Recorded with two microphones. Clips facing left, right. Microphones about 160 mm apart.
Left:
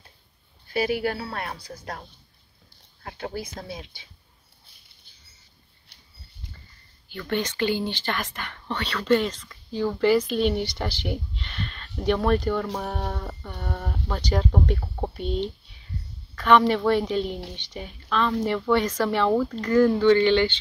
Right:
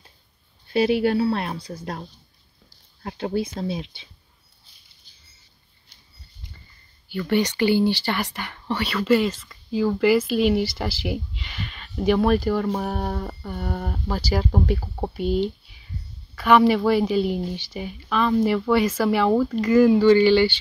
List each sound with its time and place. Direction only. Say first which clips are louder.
1.0 s speech: right 8 dB; 25° right (ahead or behind)
5.9 s dog: even; 65° left (ahead or behind)
7.1 s speech: right 6 dB; 10° right (ahead or behind)